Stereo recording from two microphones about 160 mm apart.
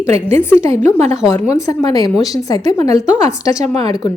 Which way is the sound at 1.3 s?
20° left (ahead or behind).